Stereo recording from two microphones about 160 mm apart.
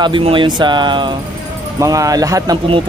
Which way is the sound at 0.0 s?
30° right (ahead or behind).